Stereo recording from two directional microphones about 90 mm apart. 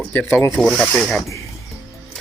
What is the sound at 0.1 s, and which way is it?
Speech, 20° left (ahead or behind).